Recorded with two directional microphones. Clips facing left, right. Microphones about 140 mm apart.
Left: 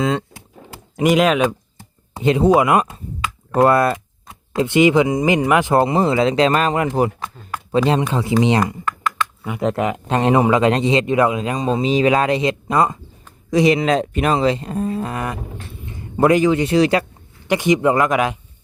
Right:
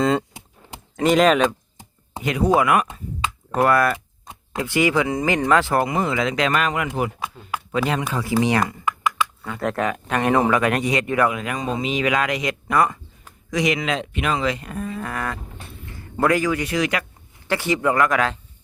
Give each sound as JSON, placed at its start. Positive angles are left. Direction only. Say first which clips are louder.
{"t": 0.0, "sound": "speech", "louder": "even", "side_deg": 0}
{"t": 0.9, "sound": "speech", "louder": "left 1 dB", "side_deg": 10}
{"t": 2.2, "sound": "speech", "louder": "left 5 dB", "side_deg": 25}
{"t": 7.2, "sound": "speech", "louder": "even", "side_deg": -10}
{"t": 7.9, "sound": "speech", "louder": "left 5 dB", "side_deg": 25}
{"t": 8.8, "sound": "computer keyboard", "louder": "even", "side_deg": -10}
{"t": 9.4, "sound": "speech", "louder": "left 6 dB", "side_deg": 15}
{"t": 17.5, "sound": "speech", "louder": "left 5 dB", "side_deg": 20}